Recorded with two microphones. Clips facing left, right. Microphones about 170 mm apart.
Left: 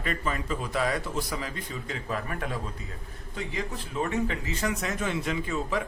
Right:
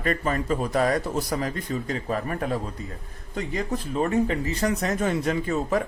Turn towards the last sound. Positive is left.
turn(degrees=-45)  # may be behind; listen again after turning